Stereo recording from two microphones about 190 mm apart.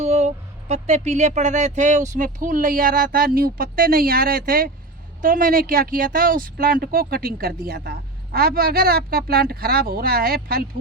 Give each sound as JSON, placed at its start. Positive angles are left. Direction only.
{"t": 0.0, "sound": "speech", "side_deg": -35}